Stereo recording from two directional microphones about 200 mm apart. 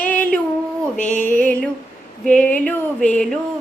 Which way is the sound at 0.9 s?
40° left (ahead or behind).